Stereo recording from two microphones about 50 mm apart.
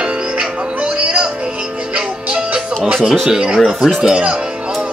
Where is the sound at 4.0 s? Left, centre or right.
Centre.